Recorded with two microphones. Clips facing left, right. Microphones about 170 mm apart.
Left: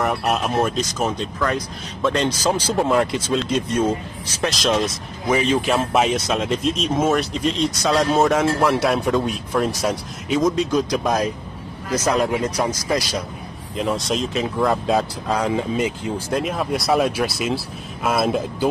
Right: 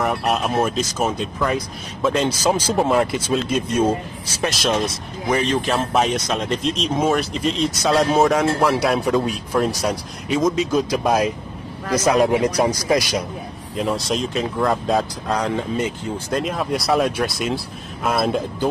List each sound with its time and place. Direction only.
0.0 s speech: centre (ahead or behind)
12.2 s speech: 15° right (ahead or behind)
13.7 s speech: centre (ahead or behind)